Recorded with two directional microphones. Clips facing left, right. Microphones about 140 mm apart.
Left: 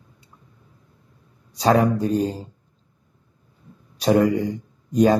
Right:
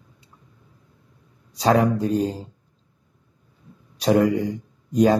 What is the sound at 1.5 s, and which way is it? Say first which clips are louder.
Speech: left 1 dB; 45° left (ahead or behind).